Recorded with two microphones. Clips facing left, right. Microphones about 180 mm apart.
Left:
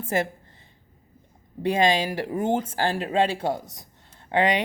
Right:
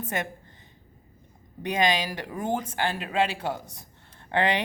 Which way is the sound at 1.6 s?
30° left (ahead or behind).